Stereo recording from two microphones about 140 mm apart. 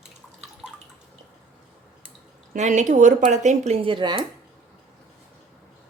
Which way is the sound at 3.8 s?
35° right (ahead or behind).